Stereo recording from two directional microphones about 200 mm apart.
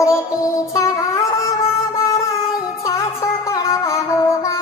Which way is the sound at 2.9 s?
15° left (ahead or behind).